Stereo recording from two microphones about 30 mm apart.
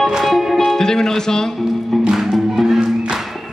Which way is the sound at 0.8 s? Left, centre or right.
Centre.